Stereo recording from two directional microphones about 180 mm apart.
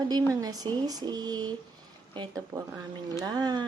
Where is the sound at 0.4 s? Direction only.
20° right (ahead or behind).